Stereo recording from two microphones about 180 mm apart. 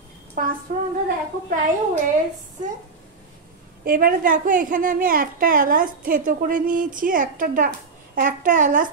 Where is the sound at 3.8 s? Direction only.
55° right (ahead or behind).